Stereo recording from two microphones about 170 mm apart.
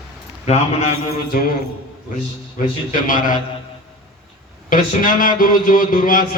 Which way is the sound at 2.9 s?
50° left (ahead or behind).